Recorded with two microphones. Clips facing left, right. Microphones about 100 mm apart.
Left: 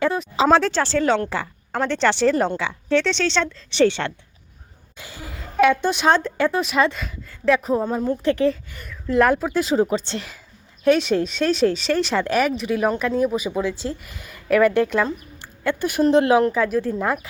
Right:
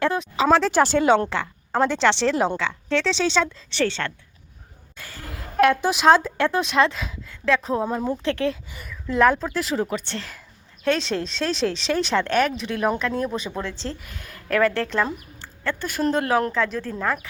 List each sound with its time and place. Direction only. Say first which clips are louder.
0.0 s speech: left 1 dB; centre (ahead or behind)
0.7 s speech: right 2 dB; 15° right (ahead or behind)
1.8 s speech: left 1 dB; centre (ahead or behind)
3.7 s a woman's voice: left 6 dB; 15° left (ahead or behind)
5.3 s speech: left 1 dB; centre (ahead or behind)
9.5 s speech: left 5 dB; 20° left (ahead or behind)
10.8 s a woman's voice: left 6 dB; 5° left (ahead or behind); by 16.4 s 20° left (ahead or behind)
16.5 s a woman's voice: left 4 dB; 5° left (ahead or behind)